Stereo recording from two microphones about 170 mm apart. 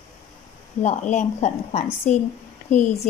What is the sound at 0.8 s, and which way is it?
A woman's voice, 45° left (ahead or behind).